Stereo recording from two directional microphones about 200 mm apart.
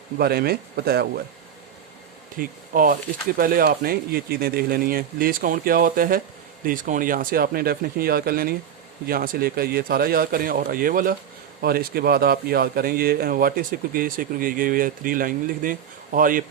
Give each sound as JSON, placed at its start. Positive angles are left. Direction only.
{"t": 0.2, "sound": "a man's voice", "side_deg": -50}
{"t": 2.4, "sound": "a man's voice", "side_deg": -45}